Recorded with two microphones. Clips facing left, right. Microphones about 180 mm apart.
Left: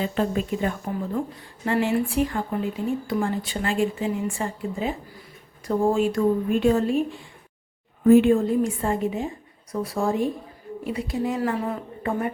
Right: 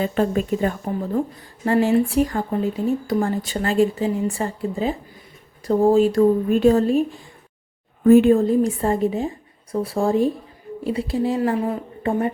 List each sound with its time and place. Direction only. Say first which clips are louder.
0.0 s a woman's voice: right 4 dB; 45° right (ahead or behind); by 12.3 s 30° right (ahead or behind)